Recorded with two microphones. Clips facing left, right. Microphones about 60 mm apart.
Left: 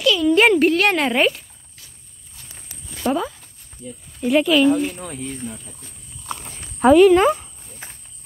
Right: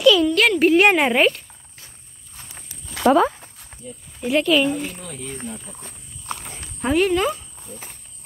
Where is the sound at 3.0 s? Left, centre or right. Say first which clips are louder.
Right 6 dB; right.